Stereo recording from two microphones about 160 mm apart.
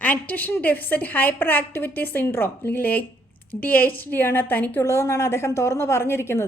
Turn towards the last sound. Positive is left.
turn(degrees=15)  # may be behind; listen again after turning